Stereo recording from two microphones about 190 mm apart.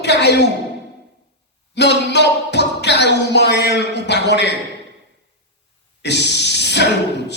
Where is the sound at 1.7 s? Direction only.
65° left (ahead or behind).